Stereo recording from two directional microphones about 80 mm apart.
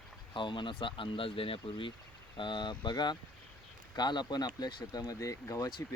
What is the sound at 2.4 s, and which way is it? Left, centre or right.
Speech, left.